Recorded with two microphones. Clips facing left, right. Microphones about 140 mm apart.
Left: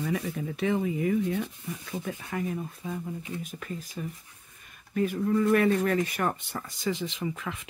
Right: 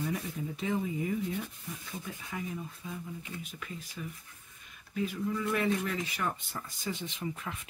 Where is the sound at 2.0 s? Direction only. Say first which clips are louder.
Left 7 dB; 55° left (ahead or behind).